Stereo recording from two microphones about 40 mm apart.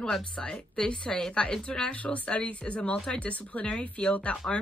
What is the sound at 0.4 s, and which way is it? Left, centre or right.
A woman's voice, left.